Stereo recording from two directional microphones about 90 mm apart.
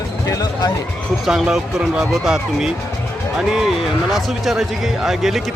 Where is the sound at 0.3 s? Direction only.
40° left (ahead or behind).